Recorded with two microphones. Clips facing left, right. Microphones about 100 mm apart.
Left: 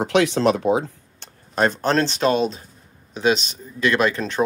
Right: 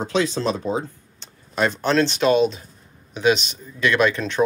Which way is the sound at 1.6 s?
40° left (ahead or behind).